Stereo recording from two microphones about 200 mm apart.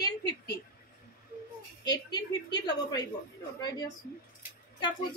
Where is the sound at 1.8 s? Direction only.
20° left (ahead or behind).